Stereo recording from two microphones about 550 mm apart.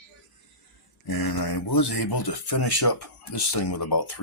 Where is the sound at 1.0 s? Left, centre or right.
Left.